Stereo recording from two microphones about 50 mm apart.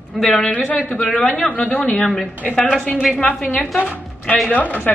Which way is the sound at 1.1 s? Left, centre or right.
Centre.